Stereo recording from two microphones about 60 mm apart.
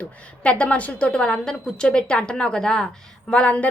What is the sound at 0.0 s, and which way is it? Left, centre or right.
A woman's voice, centre.